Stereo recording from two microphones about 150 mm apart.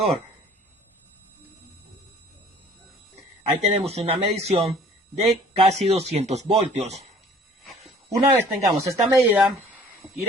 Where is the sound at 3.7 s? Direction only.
45° right (ahead or behind).